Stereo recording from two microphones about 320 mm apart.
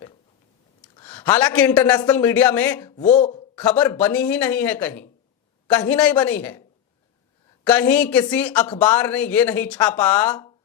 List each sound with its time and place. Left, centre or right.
0.9 s speech: centre
3.0 s speech: left
3.5 s speech: centre
7.7 s speech: centre